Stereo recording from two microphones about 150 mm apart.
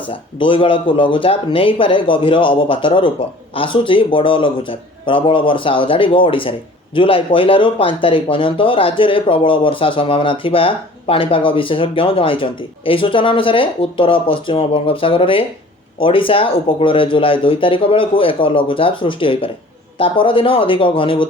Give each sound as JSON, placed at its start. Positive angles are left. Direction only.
{"t": 0.1, "sound": "speech", "side_deg": 35}